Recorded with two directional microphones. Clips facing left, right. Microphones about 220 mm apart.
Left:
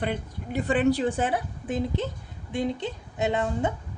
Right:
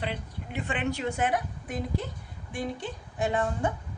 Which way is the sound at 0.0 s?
45° left (ahead or behind).